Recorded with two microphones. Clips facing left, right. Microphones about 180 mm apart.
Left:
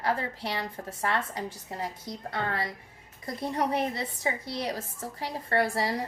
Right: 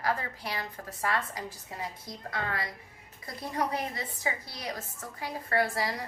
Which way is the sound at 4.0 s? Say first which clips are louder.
Left 3 dB; 30° left (ahead or behind).